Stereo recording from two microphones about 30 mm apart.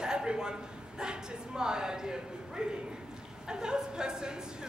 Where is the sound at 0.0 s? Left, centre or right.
Right.